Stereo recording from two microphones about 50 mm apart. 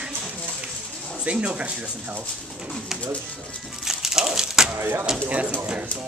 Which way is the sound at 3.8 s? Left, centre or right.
Centre.